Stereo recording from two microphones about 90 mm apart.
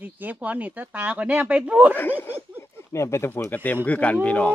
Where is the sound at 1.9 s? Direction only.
20° left (ahead or behind).